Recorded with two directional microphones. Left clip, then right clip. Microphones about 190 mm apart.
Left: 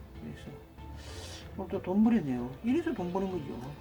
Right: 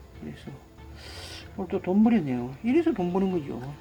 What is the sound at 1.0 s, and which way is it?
Speech, 40° right (ahead or behind).